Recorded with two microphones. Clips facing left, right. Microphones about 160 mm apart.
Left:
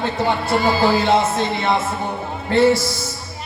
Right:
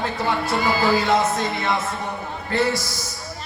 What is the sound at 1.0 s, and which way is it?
Music, 30° left (ahead or behind).